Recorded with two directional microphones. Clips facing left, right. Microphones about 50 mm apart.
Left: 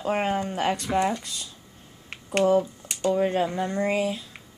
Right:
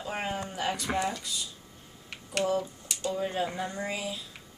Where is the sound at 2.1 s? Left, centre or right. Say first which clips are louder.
Left 8 dB; left.